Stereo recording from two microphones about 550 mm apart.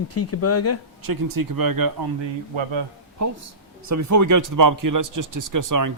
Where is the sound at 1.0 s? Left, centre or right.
Right.